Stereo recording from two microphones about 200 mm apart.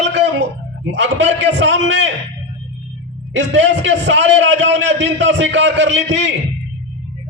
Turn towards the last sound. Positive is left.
turn(degrees=-65)  # may be behind; listen again after turning